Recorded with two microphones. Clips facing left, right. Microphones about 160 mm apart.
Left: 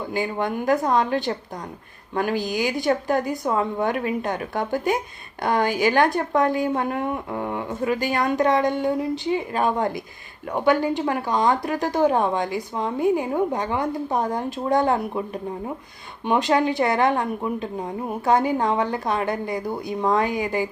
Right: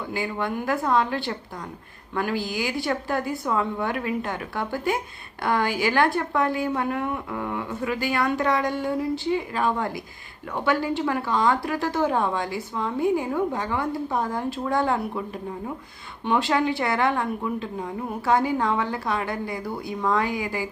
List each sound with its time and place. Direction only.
0.1 s speech: 20° left (ahead or behind)
6.5 s speech: 40° left (ahead or behind)
6.9 s speech: 25° left (ahead or behind)
8.2 s speech: 20° left (ahead or behind)
10.5 s speech: 20° left (ahead or behind)